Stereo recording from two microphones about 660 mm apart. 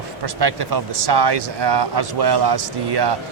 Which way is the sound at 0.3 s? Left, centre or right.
Right.